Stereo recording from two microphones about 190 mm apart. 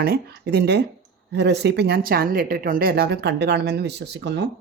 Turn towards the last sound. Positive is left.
turn(degrees=-65)  # may be behind; listen again after turning